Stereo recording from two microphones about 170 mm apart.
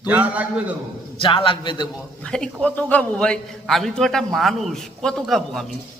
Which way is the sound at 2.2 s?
5° left (ahead or behind).